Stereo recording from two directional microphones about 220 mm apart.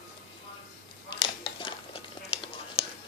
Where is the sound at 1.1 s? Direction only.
20° left (ahead or behind).